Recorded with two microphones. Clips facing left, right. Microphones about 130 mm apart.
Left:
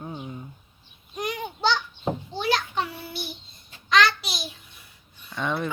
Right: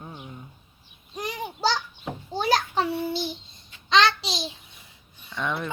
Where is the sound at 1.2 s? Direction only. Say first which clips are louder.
Left 1 dB; 35° right (ahead or behind).